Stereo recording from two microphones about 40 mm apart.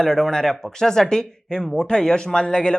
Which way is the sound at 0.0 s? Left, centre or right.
Centre.